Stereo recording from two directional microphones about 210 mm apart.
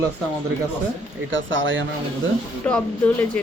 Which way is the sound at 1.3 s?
65° right (ahead or behind).